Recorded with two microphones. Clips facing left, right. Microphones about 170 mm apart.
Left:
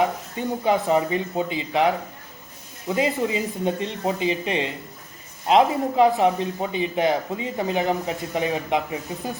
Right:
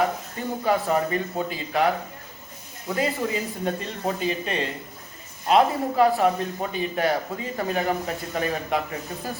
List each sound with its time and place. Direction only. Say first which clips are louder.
0.0 s speech: left 2 dB; 20° left (ahead or behind)